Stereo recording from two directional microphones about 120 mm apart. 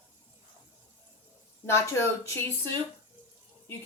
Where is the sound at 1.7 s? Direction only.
20° left (ahead or behind).